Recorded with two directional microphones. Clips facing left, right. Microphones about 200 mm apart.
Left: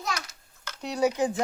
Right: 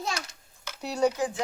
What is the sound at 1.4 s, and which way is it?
Speech, 50° left (ahead or behind).